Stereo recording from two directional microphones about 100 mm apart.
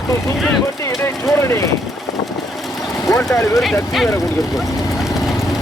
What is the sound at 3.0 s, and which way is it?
Speech, 35° left (ahead or behind).